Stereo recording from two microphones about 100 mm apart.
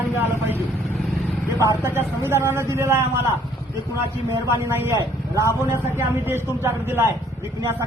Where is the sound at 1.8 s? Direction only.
25° right (ahead or behind).